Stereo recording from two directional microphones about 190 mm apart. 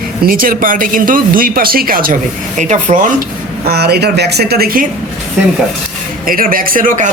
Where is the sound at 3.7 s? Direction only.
55° right (ahead or behind).